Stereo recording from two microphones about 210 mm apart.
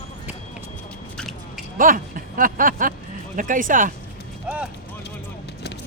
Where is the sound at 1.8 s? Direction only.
40° right (ahead or behind).